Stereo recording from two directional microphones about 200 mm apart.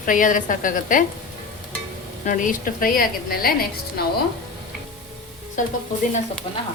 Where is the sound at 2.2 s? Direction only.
40° left (ahead or behind).